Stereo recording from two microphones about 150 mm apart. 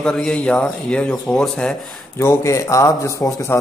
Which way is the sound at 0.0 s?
5° left (ahead or behind).